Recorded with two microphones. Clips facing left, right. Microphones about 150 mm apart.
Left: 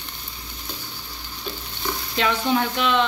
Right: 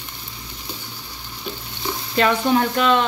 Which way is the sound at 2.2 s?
45° right (ahead or behind).